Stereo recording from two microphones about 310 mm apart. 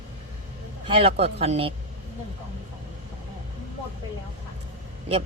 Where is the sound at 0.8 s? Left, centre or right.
Centre.